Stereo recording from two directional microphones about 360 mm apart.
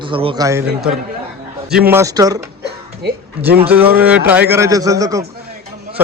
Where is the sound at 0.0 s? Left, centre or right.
Centre.